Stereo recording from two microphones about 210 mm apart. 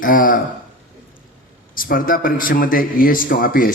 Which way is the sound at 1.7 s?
40° left (ahead or behind).